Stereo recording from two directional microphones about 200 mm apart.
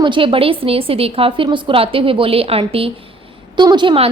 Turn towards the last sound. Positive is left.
turn(degrees=-25)  # may be behind; listen again after turning